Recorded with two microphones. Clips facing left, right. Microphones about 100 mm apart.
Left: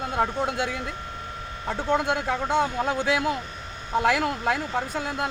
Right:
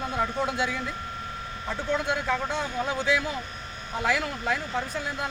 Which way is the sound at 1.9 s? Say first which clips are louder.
Left 3 dB; 60° left (ahead or behind).